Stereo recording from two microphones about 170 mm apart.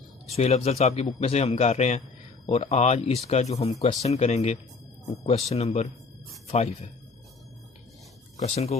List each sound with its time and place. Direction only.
0.3 s speech: 35° left (ahead or behind)
8.4 s speech: 35° left (ahead or behind)